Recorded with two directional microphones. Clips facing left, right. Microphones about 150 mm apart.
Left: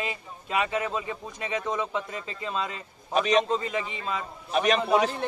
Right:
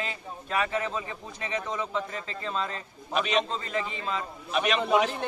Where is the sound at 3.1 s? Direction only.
35° left (ahead or behind).